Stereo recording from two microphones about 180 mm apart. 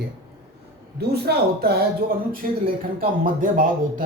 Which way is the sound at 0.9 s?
60° right (ahead or behind).